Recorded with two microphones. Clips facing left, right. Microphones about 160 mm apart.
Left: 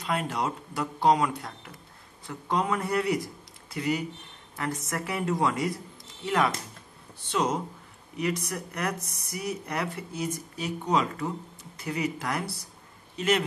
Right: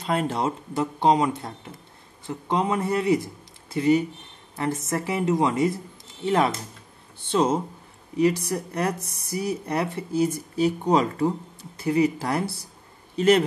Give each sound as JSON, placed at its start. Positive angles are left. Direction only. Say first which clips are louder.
{"t": 0.0, "sound": "speech", "louder": "right 5 dB", "side_deg": -30}